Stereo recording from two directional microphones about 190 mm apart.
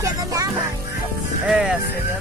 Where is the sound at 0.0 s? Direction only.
20° right (ahead or behind).